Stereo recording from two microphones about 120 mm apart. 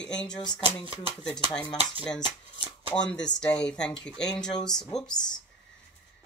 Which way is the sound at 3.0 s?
10° left (ahead or behind).